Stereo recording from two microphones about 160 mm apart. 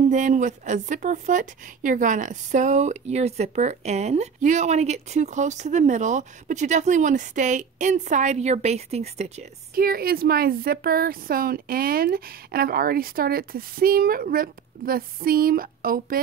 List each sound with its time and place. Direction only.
0.1 s speech: 50° right (ahead or behind)
9.8 s a woman's voice: 70° right (ahead or behind)